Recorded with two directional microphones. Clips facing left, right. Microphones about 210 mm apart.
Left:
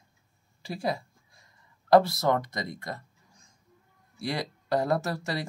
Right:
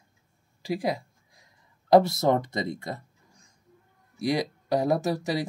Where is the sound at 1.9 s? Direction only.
20° right (ahead or behind).